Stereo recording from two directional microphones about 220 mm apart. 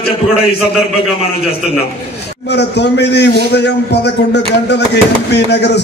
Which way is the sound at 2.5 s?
50° left (ahead or behind).